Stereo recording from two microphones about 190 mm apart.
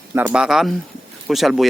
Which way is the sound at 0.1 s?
10° right (ahead or behind).